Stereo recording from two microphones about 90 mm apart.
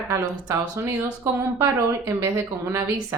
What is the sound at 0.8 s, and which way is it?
Speech, 30° right (ahead or behind).